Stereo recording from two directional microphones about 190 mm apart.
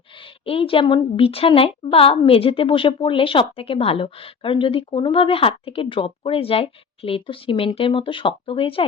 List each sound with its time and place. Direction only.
0.2 s a woman's voice: 30° left (ahead or behind)